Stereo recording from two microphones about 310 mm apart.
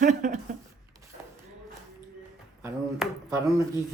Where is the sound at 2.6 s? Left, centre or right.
Centre.